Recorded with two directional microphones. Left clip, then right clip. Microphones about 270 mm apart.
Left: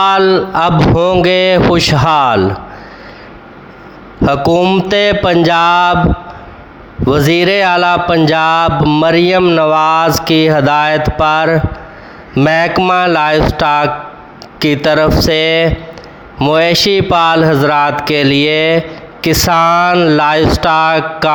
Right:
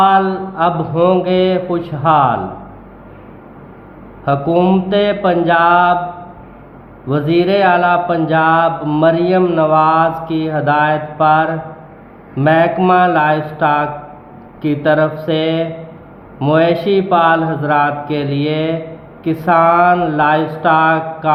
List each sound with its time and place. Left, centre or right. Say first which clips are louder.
0.0 s mantra: left 2 dB; left
4.3 s mantra: left 3 dB; left
7.1 s mantra: left 4 dB; left
19.2 s speech: left 2 dB; left